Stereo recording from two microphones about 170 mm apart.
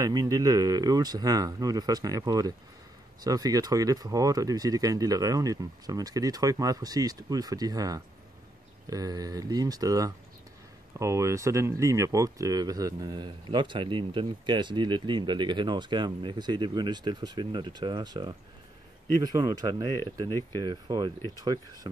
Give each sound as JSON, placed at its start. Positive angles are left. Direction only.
{"t": 0.0, "sound": "speech", "side_deg": -20}